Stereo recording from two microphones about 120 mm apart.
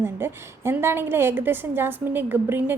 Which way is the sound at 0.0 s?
20° right (ahead or behind).